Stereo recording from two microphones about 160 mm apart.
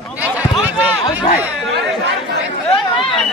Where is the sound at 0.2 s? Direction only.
10° right (ahead or behind).